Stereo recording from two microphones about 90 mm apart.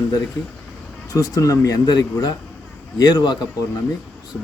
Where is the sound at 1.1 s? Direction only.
40° left (ahead or behind).